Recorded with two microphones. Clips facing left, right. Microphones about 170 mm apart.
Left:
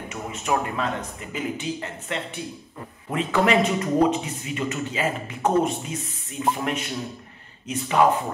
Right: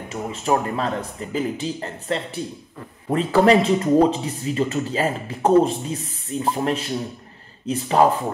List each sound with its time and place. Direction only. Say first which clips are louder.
0.1 s speech: right 4 dB; 30° right (ahead or behind)